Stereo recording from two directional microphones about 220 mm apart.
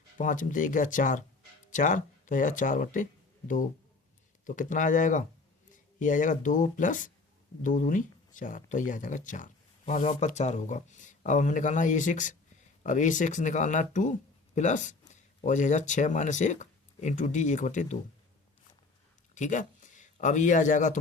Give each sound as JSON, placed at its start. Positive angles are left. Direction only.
{"t": 0.2, "sound": "speech", "side_deg": 35}
{"t": 19.3, "sound": "speech", "side_deg": 35}